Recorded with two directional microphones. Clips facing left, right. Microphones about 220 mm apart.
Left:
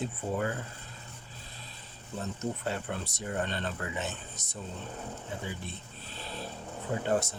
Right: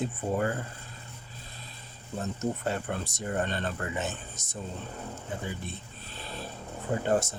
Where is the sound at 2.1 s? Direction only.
45° right (ahead or behind).